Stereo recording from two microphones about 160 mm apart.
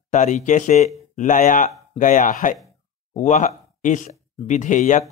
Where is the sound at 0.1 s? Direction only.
50° left (ahead or behind).